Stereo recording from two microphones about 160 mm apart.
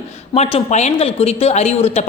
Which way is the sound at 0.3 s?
40° left (ahead or behind).